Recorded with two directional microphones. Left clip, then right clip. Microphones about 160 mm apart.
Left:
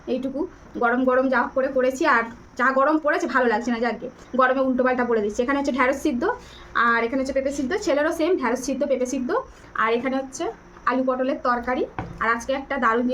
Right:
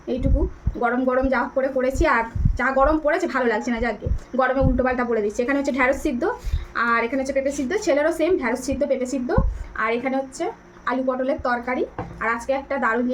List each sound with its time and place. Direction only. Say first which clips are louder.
0.8 s a woman's voice: left 1 dB; 15° left (ahead or behind)